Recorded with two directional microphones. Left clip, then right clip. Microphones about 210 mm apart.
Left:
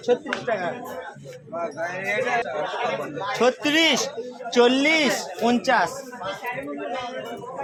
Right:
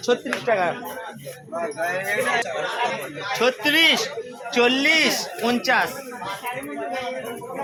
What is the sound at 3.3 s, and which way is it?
A man's voice, 55° left (ahead or behind).